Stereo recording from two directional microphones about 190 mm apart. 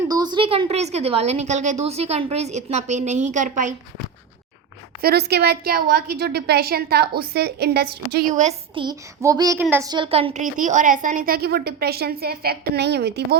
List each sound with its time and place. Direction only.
0.1 s a woman's voice: 20° right (ahead or behind); by 3.8 s 40° right (ahead or behind)
4.9 s a woman's voice: 55° right (ahead or behind)
8.4 s a woman's voice: 35° right (ahead or behind)
8.8 s speech: 20° right (ahead or behind); by 13.2 s 60° right (ahead or behind)